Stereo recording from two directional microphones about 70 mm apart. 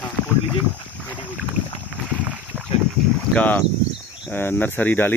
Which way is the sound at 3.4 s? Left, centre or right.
Left.